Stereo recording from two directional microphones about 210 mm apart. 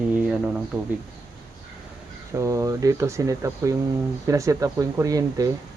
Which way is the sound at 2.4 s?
15° right (ahead or behind).